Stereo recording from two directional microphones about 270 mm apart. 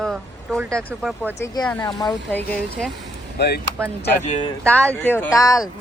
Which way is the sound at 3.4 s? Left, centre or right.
Left.